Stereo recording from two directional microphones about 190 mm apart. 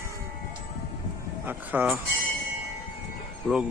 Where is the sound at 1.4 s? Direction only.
10° right (ahead or behind).